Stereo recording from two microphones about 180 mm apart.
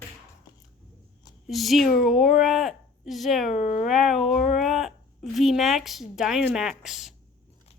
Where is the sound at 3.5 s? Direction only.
40° left (ahead or behind).